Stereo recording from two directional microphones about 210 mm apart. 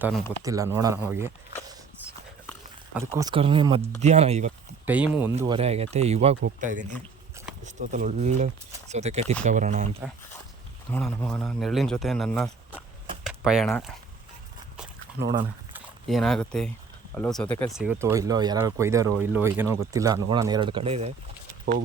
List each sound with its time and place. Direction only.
0.4 s speech: 15° right (ahead or behind)
2.9 s speech: 10° right (ahead or behind); by 4.5 s 30° right (ahead or behind)
4.9 s speech: 5° right (ahead or behind)
5.5 s speech: 30° right (ahead or behind)
10.9 s a man's voice: 5° left (ahead or behind)
13.2 s a sound: centre (ahead or behind)
15.7 s speech: centre (ahead or behind)
17.7 s speech: 10° right (ahead or behind); by 21.1 s 30° right (ahead or behind)